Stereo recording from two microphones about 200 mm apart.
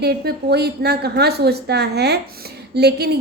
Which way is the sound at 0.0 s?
55° right (ahead or behind).